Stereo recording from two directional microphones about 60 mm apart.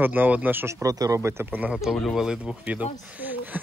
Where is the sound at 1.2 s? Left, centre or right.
Right.